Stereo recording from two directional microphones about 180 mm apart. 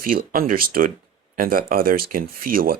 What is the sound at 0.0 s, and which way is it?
Speech, 50° right (ahead or behind).